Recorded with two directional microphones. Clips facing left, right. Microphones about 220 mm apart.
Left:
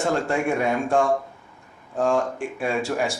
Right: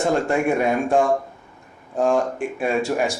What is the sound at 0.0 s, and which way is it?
A man's voice, 20° right (ahead or behind).